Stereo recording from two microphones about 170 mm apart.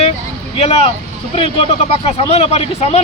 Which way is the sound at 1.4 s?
35° left (ahead or behind).